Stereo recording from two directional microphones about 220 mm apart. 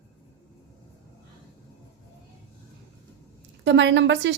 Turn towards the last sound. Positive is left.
turn(degrees=-55)  # may be behind; listen again after turning